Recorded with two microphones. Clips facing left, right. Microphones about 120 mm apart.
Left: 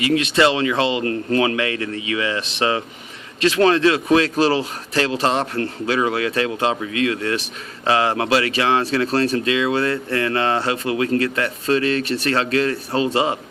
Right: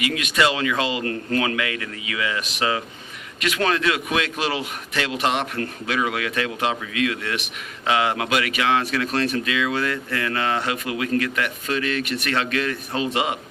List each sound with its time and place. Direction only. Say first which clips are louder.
0.0 s a man's voice: left 5 dB; 30° left (ahead or behind)